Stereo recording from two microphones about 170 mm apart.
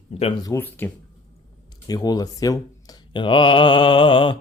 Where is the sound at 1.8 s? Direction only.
20° left (ahead or behind).